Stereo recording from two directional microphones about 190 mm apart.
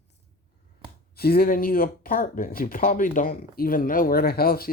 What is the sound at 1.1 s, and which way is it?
Speech, 55° left (ahead or behind).